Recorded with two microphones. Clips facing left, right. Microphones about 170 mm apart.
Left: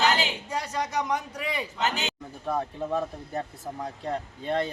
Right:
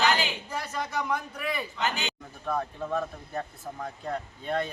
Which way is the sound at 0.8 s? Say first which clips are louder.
Left 2 dB; 15° left (ahead or behind).